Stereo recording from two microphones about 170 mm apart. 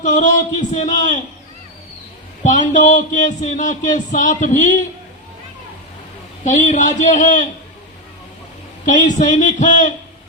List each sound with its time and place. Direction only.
0.0 s speech: 50° left (ahead or behind)
2.4 s speech: 45° left (ahead or behind)
6.4 s speech: 45° left (ahead or behind)
8.9 s speech: 45° left (ahead or behind)